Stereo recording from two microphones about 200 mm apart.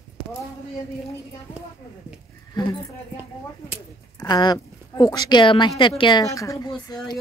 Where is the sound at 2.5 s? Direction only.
20° left (ahead or behind).